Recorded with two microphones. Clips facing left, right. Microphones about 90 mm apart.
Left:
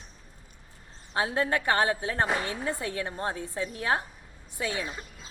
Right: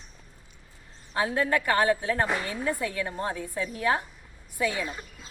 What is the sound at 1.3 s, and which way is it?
Speech, 30° left (ahead or behind).